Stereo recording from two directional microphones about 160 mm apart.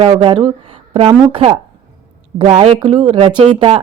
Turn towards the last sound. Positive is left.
turn(degrees=-35)  # may be behind; listen again after turning